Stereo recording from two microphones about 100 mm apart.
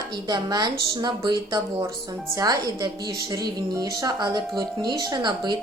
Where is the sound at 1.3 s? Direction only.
40° right (ahead or behind).